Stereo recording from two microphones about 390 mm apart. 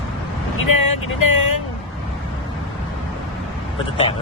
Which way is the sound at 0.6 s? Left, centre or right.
Left.